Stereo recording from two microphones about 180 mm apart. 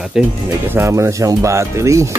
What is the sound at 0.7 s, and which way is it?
Speech, 15° right (ahead or behind).